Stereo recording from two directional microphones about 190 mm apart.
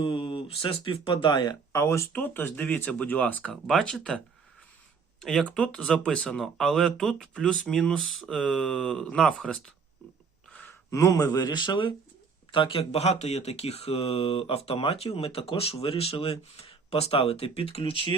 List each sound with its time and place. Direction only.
0.0 s speech: 25° left (ahead or behind); by 4.2 s 5° left (ahead or behind)
5.2 s speech: 5° left (ahead or behind); by 18.1 s 30° left (ahead or behind)